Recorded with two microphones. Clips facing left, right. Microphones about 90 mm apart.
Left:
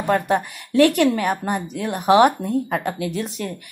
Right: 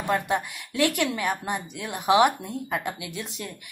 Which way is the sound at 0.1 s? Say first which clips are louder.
Left 6 dB; 35° left (ahead or behind).